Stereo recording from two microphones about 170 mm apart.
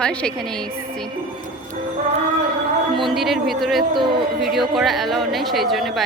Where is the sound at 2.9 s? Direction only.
Centre (ahead or behind).